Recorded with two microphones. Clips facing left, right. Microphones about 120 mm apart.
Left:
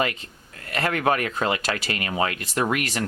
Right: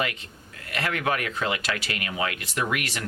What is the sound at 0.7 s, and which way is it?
Speech, 40° left (ahead or behind).